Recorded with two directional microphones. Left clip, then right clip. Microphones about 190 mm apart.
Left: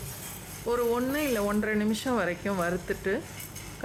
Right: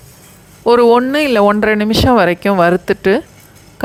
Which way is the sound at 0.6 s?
45° right (ahead or behind).